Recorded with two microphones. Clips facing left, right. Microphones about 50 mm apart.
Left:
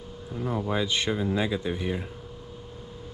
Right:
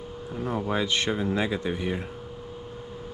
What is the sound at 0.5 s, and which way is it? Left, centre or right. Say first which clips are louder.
Speech: right 1 dB; right.